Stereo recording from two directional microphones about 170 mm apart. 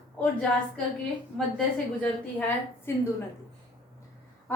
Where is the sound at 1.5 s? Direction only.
5° left (ahead or behind).